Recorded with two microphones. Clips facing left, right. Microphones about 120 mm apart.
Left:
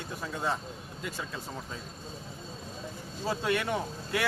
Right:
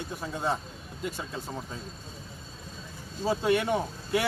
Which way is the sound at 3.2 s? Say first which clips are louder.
Right 4 dB; 20° right (ahead or behind).